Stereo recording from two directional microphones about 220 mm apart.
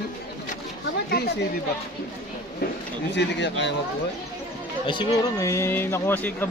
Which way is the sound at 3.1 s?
50° left (ahead or behind).